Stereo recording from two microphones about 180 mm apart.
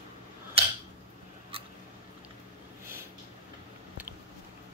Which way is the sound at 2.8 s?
15° right (ahead or behind).